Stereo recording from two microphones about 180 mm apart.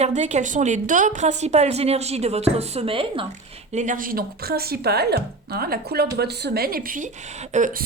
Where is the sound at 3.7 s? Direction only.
45° right (ahead or behind).